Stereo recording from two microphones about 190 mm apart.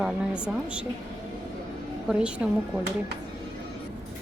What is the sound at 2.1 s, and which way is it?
Speech, 5° right (ahead or behind).